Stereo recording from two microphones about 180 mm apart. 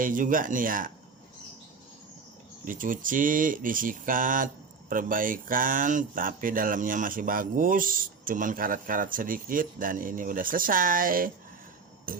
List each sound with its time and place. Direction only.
0.0 s speech: 50° right (ahead or behind)
2.6 s speech: 50° right (ahead or behind)
12.1 s a sound: 50° right (ahead or behind)